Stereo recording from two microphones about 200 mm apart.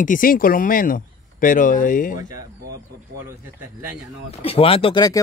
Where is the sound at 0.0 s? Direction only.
40° left (ahead or behind).